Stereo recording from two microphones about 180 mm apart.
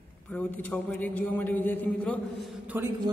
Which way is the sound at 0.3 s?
10° left (ahead or behind).